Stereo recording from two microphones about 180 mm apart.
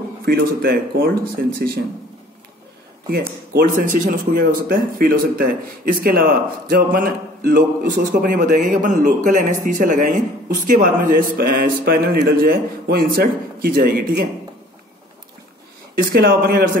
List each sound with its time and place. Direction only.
0.2 s speech: 60° right (ahead or behind)
3.1 s speech: 55° right (ahead or behind)
15.9 s speech: 55° right (ahead or behind)